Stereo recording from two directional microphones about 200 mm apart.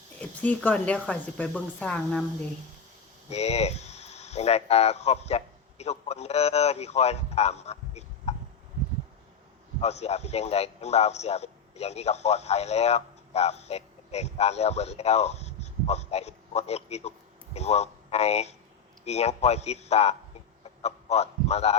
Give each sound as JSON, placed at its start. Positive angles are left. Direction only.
{"t": 0.2, "sound": "speech", "side_deg": 10}
{"t": 3.2, "sound": "speech", "side_deg": 30}
{"t": 9.8, "sound": "a man's voice", "side_deg": 35}